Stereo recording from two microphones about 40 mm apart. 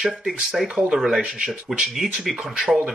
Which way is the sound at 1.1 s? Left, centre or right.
Right.